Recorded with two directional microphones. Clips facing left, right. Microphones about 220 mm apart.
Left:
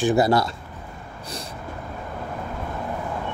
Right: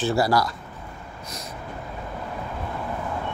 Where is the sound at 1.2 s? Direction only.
30° left (ahead or behind).